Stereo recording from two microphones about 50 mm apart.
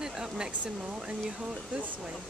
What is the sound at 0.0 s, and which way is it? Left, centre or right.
Hair dryer, centre.